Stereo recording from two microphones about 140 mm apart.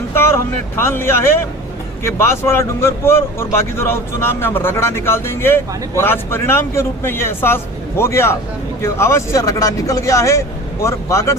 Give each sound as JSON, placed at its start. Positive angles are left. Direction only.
{"t": 0.9, "sound": "a man's voice", "side_deg": 15}